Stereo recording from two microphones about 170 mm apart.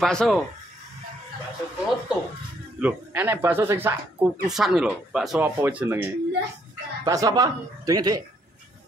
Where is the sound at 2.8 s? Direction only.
10° right (ahead or behind).